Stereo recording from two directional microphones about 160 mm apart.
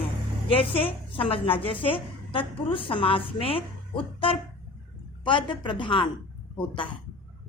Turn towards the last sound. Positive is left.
turn(degrees=30)  # may be behind; listen again after turning